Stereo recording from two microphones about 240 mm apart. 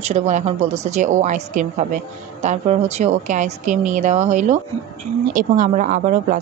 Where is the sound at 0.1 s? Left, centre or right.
Right.